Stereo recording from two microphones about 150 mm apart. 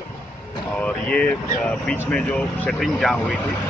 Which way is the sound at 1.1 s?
5° left (ahead or behind).